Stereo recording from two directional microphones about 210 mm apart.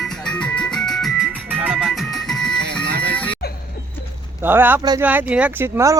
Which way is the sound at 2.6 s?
50° right (ahead or behind).